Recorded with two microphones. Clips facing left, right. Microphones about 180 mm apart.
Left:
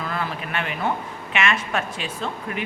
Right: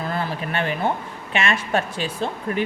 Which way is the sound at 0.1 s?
35° right (ahead or behind).